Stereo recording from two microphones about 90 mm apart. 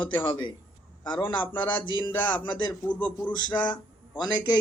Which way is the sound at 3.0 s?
60° left (ahead or behind).